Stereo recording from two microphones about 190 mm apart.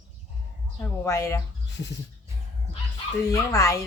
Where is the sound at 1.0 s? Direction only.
15° left (ahead or behind).